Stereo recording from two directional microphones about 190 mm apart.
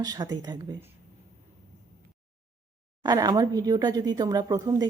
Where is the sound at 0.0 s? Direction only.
20° right (ahead or behind).